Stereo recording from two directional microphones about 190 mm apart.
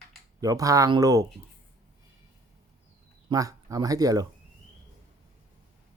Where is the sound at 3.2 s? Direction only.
15° right (ahead or behind).